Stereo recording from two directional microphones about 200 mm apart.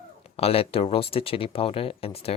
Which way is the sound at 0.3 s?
30° left (ahead or behind).